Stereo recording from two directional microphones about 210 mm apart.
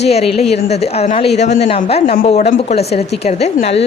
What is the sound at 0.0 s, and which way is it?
A woman's voice, 30° left (ahead or behind).